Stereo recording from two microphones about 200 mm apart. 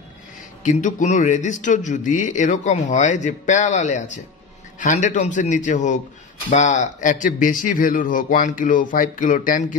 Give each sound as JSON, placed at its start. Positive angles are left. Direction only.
{"t": 0.7, "sound": "speech", "side_deg": 40}